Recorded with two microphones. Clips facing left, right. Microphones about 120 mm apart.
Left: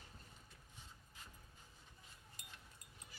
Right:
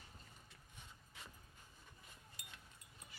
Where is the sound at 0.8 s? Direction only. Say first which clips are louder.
Right 3 dB; 70° right (ahead or behind).